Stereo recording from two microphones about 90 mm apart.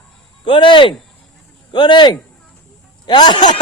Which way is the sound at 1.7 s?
60° left (ahead or behind).